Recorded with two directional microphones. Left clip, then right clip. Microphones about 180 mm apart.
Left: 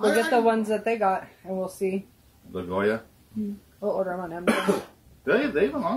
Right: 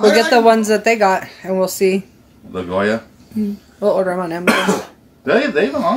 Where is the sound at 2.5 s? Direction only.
15° left (ahead or behind).